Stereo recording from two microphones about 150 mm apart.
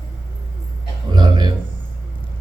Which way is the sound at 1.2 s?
30° right (ahead or behind).